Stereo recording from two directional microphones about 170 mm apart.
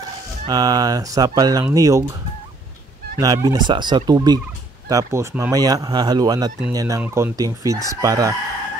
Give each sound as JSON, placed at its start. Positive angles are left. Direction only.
{"t": 0.5, "sound": "speech", "side_deg": -25}
{"t": 3.2, "sound": "speech", "side_deg": -20}